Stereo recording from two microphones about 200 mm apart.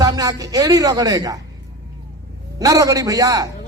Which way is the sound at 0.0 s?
20° right (ahead or behind).